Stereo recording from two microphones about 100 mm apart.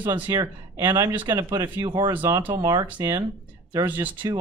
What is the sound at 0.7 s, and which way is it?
Speech, 35° right (ahead or behind).